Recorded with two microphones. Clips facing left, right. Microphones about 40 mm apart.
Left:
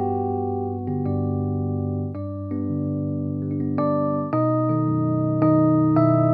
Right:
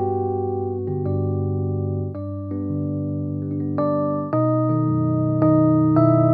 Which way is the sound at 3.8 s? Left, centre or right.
Centre.